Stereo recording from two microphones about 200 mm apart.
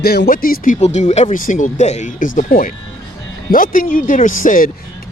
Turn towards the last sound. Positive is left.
turn(degrees=40)  # may be behind; listen again after turning